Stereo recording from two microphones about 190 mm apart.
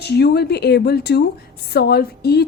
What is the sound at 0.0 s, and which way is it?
A woman's voice, 60° left (ahead or behind).